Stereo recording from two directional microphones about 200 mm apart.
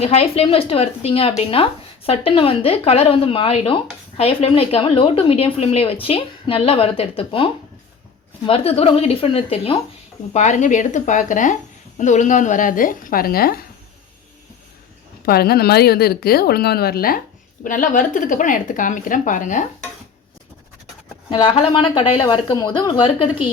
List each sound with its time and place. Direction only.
0.0 s a woman's voice: 30° left (ahead or behind); by 13.7 s 50° left (ahead or behind)
15.2 s a woman's voice: 50° left (ahead or behind)
21.2 s a woman's voice: 25° left (ahead or behind)